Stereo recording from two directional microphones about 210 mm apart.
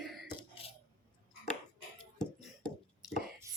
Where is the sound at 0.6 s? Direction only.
25° left (ahead or behind).